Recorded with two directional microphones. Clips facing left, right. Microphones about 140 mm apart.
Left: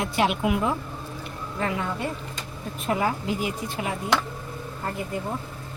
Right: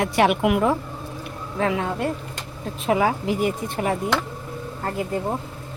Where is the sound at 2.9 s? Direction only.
90° right; by 3.9 s 60° right (ahead or behind).